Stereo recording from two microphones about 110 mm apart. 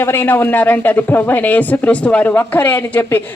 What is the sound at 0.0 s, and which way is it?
A woman's voice, 20° left (ahead or behind).